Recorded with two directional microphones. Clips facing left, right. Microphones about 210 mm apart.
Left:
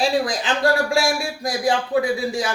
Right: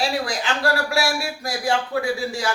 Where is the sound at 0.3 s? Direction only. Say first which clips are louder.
Left 3 dB; 20° left (ahead or behind).